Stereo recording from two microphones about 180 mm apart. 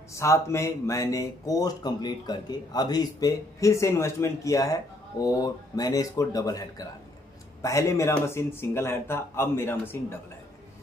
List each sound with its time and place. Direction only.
0.1 s speech: 15° left (ahead or behind)